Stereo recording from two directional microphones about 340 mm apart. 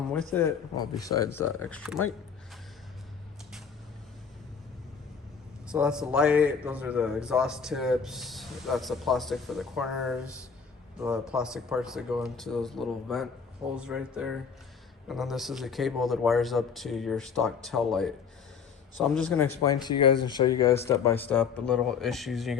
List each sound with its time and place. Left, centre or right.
0.3 s a man's voice: centre
1.0 s speech: left
1.7 s a man's voice: centre
5.7 s a man's voice: centre
19.1 s a man's voice: centre